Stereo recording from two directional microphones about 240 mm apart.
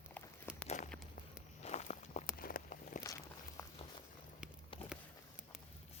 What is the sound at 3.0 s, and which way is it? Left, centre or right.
Walk, centre.